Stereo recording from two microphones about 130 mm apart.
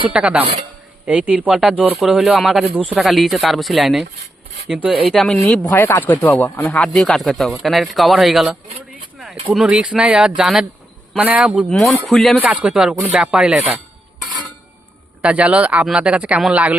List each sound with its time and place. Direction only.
0.1 s speech: 10° right (ahead or behind)
5.7 s speech: 15° left (ahead or behind); by 8.5 s centre (ahead or behind)
9.1 s a sound: centre (ahead or behind)
9.5 s speech: 5° right (ahead or behind)
15.2 s speech: 10° right (ahead or behind)